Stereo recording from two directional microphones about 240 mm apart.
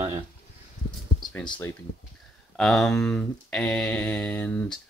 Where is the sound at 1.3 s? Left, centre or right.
Centre.